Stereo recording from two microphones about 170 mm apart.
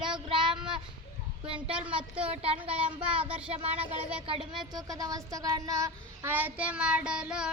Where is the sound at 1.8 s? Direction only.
30° right (ahead or behind).